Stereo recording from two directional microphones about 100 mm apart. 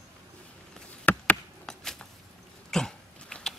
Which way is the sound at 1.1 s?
20° left (ahead or behind).